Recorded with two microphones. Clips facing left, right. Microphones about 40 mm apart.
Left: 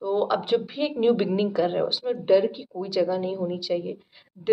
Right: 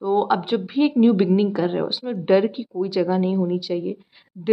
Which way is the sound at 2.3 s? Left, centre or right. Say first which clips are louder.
Right 3 dB; right.